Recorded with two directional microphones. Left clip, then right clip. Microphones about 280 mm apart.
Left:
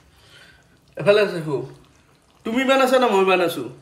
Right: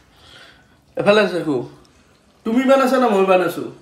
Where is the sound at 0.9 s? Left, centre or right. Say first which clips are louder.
Right 2 dB; right.